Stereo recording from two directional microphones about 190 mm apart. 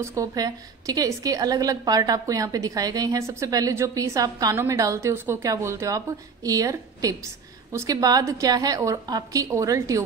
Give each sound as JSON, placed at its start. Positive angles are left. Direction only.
{"t": 0.0, "sound": "a woman's voice", "side_deg": -15}